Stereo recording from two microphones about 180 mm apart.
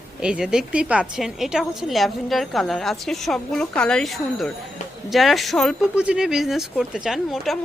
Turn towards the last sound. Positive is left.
turn(degrees=0)  # may be behind; listen again after turning